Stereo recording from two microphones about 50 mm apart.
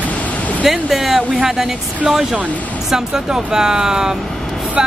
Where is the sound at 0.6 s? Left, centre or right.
Centre.